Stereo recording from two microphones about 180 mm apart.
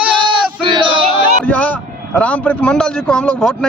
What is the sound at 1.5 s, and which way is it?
A man's voice, 5° left (ahead or behind).